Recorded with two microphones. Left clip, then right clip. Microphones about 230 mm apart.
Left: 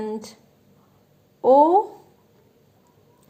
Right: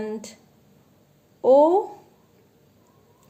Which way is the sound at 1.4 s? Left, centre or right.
Centre.